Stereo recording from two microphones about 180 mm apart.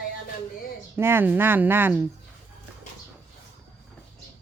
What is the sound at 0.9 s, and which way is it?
Speech, 10° right (ahead or behind).